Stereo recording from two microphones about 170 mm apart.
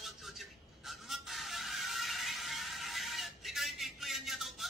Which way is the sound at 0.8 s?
Centre (ahead or behind).